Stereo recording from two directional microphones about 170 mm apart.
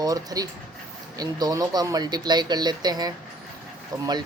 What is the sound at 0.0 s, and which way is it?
Speech, 20° right (ahead or behind).